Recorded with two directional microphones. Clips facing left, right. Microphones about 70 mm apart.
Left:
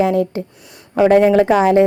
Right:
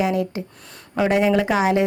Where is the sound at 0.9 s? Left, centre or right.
Left.